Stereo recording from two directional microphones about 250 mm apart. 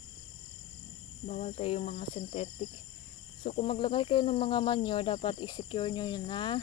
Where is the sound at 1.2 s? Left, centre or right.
Left.